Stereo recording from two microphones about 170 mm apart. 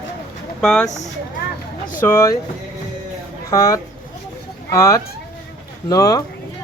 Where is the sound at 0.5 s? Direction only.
5° left (ahead or behind).